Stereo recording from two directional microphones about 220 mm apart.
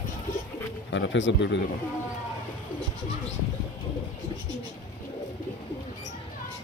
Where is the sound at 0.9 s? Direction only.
55° left (ahead or behind).